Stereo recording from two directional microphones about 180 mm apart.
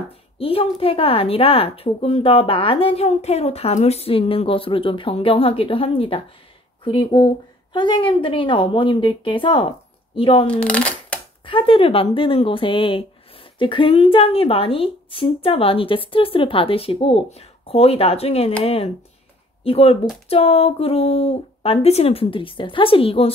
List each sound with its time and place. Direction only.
0.4 s a woman's voice: 30° left (ahead or behind)
10.4 s speech: 5° left (ahead or behind)
11.4 s speech: 30° left (ahead or behind)